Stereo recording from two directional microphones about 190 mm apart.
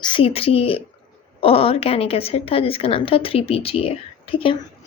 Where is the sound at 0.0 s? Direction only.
25° left (ahead or behind).